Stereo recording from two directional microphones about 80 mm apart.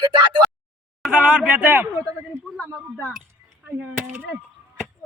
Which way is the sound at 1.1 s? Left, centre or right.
Centre.